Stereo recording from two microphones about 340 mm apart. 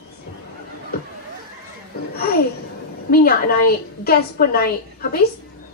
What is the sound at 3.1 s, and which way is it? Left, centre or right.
A woman's voice, left.